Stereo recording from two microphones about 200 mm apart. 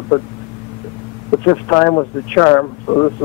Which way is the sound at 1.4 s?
20° left (ahead or behind).